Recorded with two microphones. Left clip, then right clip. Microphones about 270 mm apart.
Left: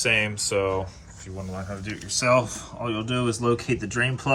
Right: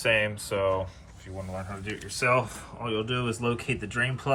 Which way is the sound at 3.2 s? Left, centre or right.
Left.